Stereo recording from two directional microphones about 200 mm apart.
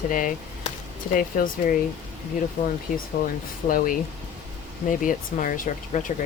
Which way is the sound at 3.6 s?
45° left (ahead or behind).